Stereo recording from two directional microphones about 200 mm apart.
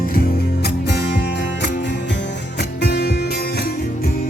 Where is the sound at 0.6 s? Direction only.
60° left (ahead or behind).